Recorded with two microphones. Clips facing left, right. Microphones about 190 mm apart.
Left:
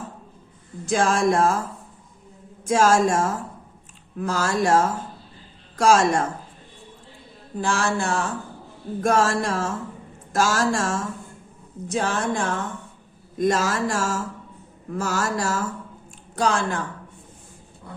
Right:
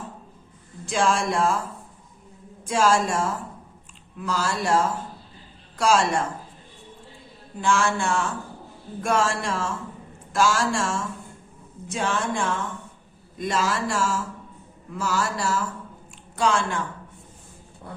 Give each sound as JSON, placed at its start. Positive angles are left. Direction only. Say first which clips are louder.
{"t": 0.9, "sound": "speech", "louder": "left 3 dB", "side_deg": 45}
{"t": 2.6, "sound": "speech", "louder": "left 3 dB", "side_deg": 45}
{"t": 7.6, "sound": "speech", "louder": "right 1 dB", "side_deg": 35}